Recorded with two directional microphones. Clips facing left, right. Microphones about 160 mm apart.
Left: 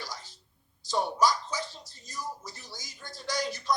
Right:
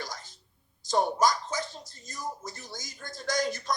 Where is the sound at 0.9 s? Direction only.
50° right (ahead or behind).